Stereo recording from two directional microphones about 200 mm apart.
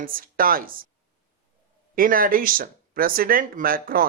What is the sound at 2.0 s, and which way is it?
Speech, 45° right (ahead or behind).